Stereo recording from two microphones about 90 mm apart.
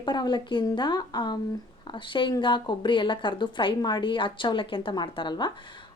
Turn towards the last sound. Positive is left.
turn(degrees=60)  # may be behind; listen again after turning